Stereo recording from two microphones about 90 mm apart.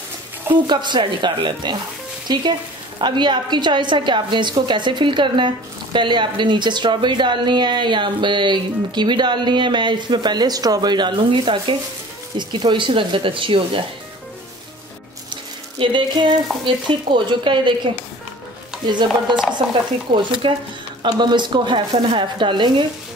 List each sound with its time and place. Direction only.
0.7 s a woman's voice: 55° right (ahead or behind)
2.3 s a woman's voice: 50° right (ahead or behind); by 13.8 s 70° right (ahead or behind)
15.8 s a woman's voice: 65° right (ahead or behind)
19.3 s a woman's voice: 60° right (ahead or behind)